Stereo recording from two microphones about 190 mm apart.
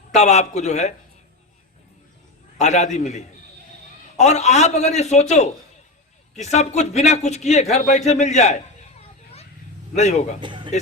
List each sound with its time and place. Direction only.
0.1 s a man's voice: 35° left (ahead or behind)
2.6 s a man's voice: 35° left (ahead or behind)
10.4 s speech: 25° right (ahead or behind)